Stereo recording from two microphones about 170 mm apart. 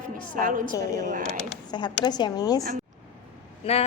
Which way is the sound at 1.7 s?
25° left (ahead or behind).